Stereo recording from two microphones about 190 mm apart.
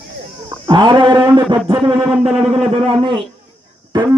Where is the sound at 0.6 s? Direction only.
25° right (ahead or behind).